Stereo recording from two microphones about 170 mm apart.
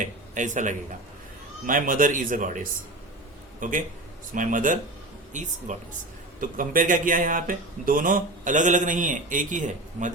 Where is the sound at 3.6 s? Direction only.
50° right (ahead or behind).